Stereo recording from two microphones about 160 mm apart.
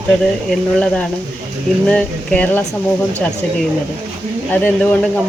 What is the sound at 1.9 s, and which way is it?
Speech, 5° left (ahead or behind).